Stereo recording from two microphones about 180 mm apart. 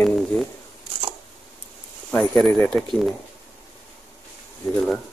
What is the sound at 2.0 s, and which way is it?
Speech, 5° left (ahead or behind).